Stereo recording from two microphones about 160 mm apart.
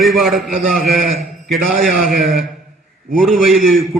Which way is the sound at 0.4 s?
65° right (ahead or behind).